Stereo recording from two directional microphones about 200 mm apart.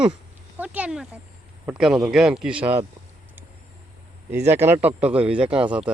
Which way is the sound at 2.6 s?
30° right (ahead or behind).